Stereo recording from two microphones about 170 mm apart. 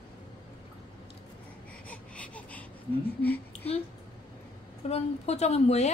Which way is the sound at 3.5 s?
40° left (ahead or behind).